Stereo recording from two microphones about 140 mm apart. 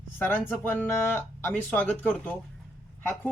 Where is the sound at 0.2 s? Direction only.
15° left (ahead or behind).